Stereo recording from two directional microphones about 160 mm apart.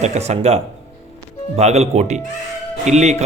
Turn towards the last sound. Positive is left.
turn(degrees=-45)  # may be behind; listen again after turning